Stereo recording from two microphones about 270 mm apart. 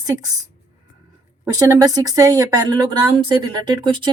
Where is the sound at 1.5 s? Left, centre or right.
Centre.